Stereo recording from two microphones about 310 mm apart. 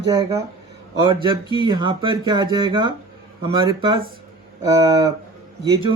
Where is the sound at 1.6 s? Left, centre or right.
Centre.